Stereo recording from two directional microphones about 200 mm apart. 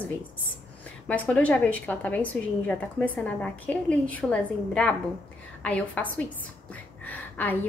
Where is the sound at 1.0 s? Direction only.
5° left (ahead or behind).